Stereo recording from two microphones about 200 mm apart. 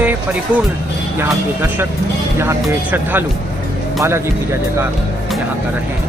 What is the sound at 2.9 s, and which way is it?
Speech, 10° right (ahead or behind).